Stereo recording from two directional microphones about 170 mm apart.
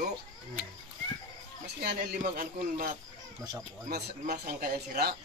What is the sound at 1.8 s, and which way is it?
Speech, 65° right (ahead or behind).